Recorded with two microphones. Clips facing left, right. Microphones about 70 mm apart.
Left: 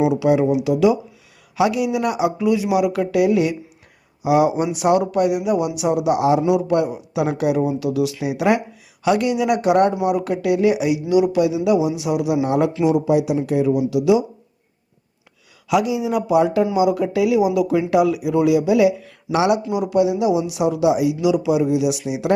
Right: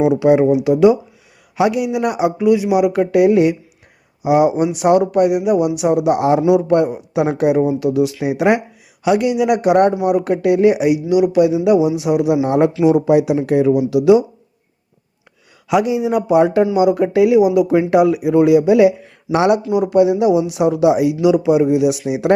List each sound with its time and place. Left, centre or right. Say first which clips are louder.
0.1 s speech: right 4 dB; right
5.8 s speech: right 3 dB; right
9.0 s speech: right 3 dB; centre; by 12.7 s right
13.1 s speech: right 4 dB; right
15.7 s speech: right 3 dB; right
22.0 s speech: right 5 dB; right